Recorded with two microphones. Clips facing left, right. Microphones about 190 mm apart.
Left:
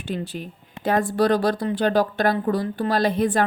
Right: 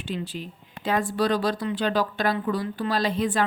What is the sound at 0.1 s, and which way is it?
A woman's voice, 50° left (ahead or behind).